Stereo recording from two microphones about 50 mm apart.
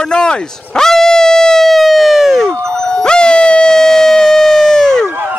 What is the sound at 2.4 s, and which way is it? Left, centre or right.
Dog, centre.